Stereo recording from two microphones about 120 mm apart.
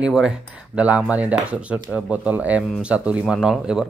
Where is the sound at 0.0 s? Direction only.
5° right (ahead or behind).